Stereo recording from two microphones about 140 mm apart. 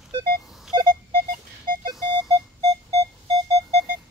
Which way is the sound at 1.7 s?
85° right.